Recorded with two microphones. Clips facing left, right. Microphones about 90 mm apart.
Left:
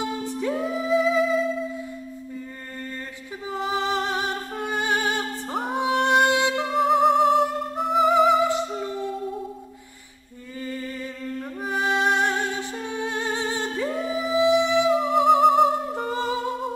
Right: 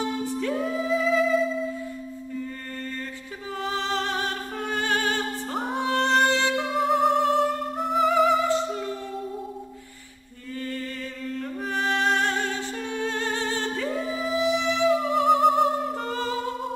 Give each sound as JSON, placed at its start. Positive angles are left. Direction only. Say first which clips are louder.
{"t": 0.4, "sound": "music", "louder": "left 2 dB", "side_deg": 10}
{"t": 3.5, "sound": "music", "louder": "left 3 dB", "side_deg": 15}
{"t": 6.6, "sound": "music", "louder": "left 5 dB", "side_deg": 0}
{"t": 11.3, "sound": "music", "louder": "left 1 dB", "side_deg": 15}
{"t": 14.9, "sound": "music", "louder": "even", "side_deg": 5}